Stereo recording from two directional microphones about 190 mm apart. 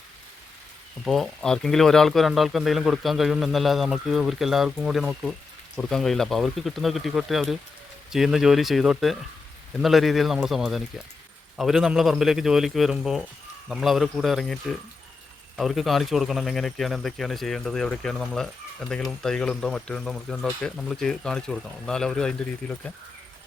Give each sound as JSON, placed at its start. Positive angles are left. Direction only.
{"t": 1.0, "sound": "speech", "side_deg": 0}